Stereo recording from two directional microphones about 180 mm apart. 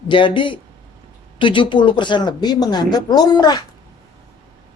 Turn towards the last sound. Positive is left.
turn(degrees=25)  # may be behind; listen again after turning